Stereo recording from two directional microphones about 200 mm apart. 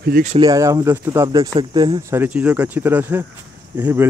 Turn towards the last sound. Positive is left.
turn(degrees=-10)  # may be behind; listen again after turning